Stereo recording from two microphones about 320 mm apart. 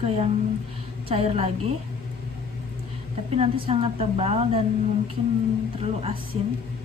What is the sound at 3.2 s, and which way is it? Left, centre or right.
A woman's voice, centre.